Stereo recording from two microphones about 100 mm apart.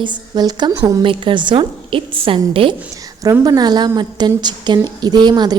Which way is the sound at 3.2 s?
35° right (ahead or behind).